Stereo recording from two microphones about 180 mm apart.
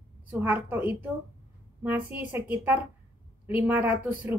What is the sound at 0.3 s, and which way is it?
Speech, 10° right (ahead or behind).